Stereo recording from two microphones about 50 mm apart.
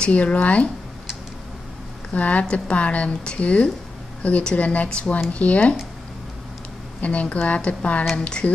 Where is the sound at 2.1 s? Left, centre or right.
Left.